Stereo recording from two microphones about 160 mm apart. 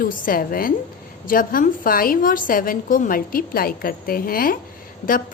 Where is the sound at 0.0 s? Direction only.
65° left (ahead or behind).